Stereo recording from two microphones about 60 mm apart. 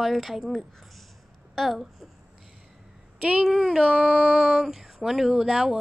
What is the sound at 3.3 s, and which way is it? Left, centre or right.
Speech, centre.